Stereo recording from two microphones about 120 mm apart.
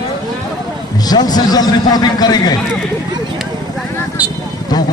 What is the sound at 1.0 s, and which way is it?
A man's voice, 35° left (ahead or behind).